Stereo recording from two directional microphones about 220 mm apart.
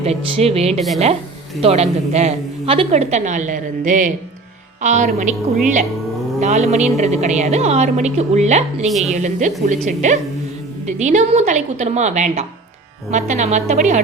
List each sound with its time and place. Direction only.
0.0 s a woman's voice: 30° right (ahead or behind)
6.4 s a woman's voice: 30° right (ahead or behind)
8.9 s speech: centre (ahead or behind)
9.1 s a woman's voice: 35° right (ahead or behind)